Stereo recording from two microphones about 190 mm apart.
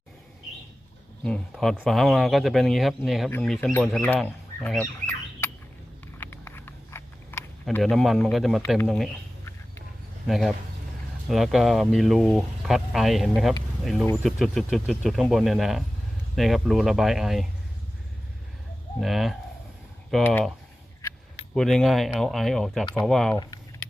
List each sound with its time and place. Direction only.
1.2 s speech: 5° left (ahead or behind)
6.1 s a sound: 10° left (ahead or behind)
7.6 s speech: centre (ahead or behind)
10.2 s speech: centre (ahead or behind)
18.9 s speech: centre (ahead or behind)
21.5 s speech: centre (ahead or behind)